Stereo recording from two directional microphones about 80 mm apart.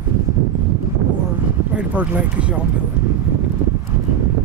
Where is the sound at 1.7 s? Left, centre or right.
Centre.